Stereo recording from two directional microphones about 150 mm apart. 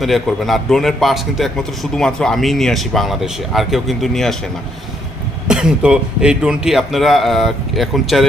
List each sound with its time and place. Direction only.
0.0 s a man's voice: centre (ahead or behind)
5.5 s a man's voice: 5° right (ahead or behind)